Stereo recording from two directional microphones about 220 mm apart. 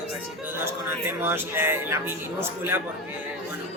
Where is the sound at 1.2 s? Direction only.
10° right (ahead or behind).